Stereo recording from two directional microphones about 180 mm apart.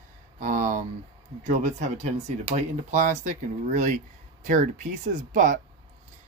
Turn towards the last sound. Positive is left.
turn(degrees=-45)  # may be behind; listen again after turning